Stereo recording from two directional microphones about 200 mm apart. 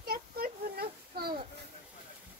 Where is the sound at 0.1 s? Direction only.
50° right (ahead or behind).